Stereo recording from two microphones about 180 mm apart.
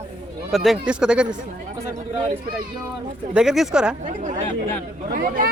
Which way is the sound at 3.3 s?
5° right (ahead or behind).